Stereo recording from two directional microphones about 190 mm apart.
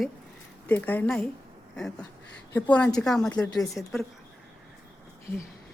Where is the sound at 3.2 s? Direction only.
15° left (ahead or behind).